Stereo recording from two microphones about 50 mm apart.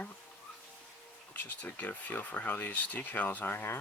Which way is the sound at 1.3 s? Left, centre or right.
Left.